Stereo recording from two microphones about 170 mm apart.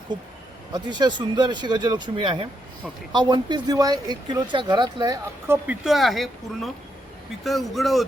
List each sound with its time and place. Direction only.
0.7 s speech: 25° right (ahead or behind)
5.5 s speech: 5° right (ahead or behind)